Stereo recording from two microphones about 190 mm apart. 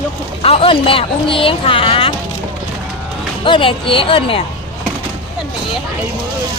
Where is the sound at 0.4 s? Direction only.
30° left (ahead or behind).